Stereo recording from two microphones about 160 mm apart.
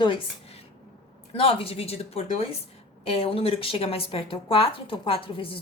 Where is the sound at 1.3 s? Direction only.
35° left (ahead or behind).